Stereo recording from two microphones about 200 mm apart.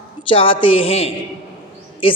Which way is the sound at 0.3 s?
25° left (ahead or behind).